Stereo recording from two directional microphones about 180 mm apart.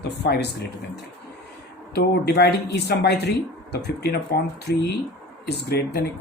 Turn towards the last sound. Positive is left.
turn(degrees=65)  # may be behind; listen again after turning